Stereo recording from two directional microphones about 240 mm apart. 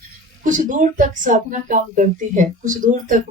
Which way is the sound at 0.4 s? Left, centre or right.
Right.